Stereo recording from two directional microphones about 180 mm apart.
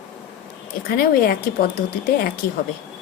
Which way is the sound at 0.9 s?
55° left (ahead or behind).